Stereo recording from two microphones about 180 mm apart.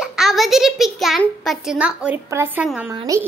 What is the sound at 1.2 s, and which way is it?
A child's voice, centre (ahead or behind).